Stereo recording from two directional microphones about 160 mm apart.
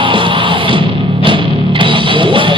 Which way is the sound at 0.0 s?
30° right (ahead or behind).